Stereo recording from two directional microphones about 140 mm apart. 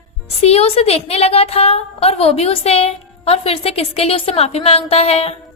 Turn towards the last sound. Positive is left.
turn(degrees=45)  # may be behind; listen again after turning